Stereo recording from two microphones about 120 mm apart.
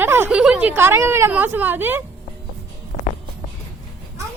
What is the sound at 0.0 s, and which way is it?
A woman's voice, 15° right (ahead or behind).